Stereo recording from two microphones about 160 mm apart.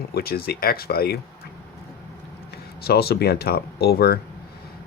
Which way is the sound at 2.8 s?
80° left.